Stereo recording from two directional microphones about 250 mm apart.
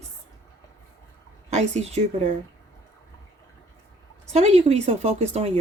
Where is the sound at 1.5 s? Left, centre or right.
Right.